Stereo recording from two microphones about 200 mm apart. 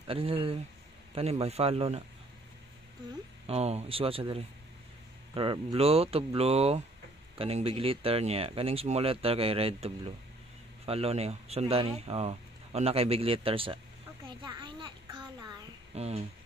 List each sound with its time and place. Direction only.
0.0 s speech: 30° right (ahead or behind)
3.4 s speech: 30° right (ahead or behind)
14.2 s a sound: 25° right (ahead or behind)